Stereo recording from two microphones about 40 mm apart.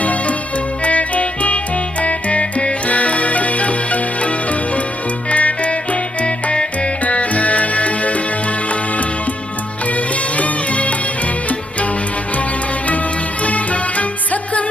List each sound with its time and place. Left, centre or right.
0.0 s music: left
13.4 s music: left